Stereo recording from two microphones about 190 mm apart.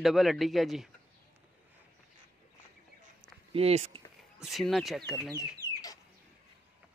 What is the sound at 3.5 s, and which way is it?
Speech, 35° right (ahead or behind).